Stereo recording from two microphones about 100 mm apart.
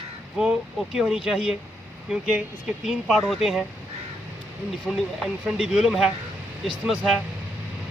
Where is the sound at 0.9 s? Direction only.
5° right (ahead or behind).